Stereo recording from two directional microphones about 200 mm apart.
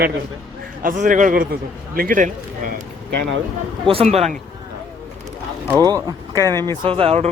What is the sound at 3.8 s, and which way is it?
Speech, 30° right (ahead or behind).